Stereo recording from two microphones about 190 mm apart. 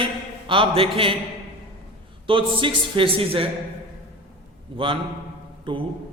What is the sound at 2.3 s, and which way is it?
A man's voice, 25° right (ahead or behind).